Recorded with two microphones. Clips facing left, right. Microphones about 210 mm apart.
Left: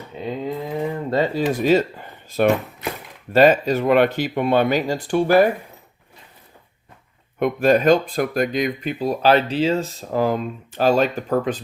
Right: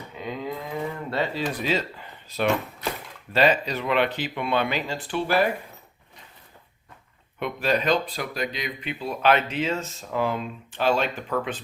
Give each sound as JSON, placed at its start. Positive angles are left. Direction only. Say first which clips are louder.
{"t": 0.2, "sound": "a sound", "louder": "left 6 dB", "side_deg": 30}
{"t": 3.3, "sound": "speech", "louder": "left 7 dB", "side_deg": 45}
{"t": 7.3, "sound": "speech", "louder": "left 8 dB", "side_deg": 50}